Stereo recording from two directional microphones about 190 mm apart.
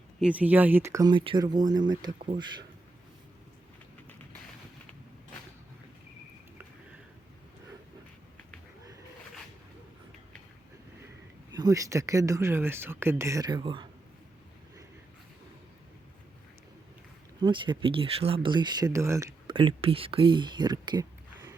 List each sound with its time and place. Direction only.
0.2 s speech: 5° right (ahead or behind); by 2.0 s 20° right (ahead or behind)
11.5 s speech: 20° right (ahead or behind)
17.4 s speech: 25° right (ahead or behind)